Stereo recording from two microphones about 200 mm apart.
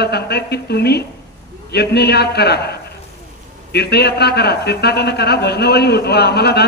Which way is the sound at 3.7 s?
55° left (ahead or behind).